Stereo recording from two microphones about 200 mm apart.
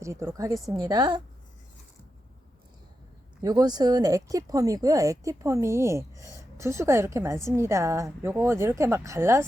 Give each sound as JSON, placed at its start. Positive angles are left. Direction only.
{"t": 0.0, "sound": "a woman's voice", "side_deg": -15}
{"t": 3.4, "sound": "speech", "side_deg": -20}